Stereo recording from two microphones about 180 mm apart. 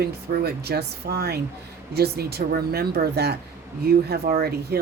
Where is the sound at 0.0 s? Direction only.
60° right (ahead or behind).